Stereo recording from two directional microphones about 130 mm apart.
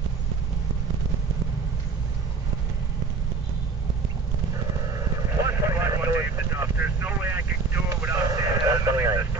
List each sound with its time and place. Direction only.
4.8 s vehicle: 25° right (ahead or behind)